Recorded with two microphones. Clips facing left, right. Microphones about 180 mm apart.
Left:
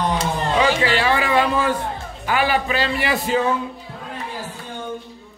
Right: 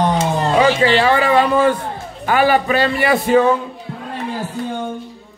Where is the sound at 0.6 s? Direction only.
40° right (ahead or behind); by 3.4 s 55° right (ahead or behind).